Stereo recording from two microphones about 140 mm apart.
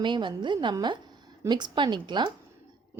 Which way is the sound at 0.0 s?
35° right (ahead or behind).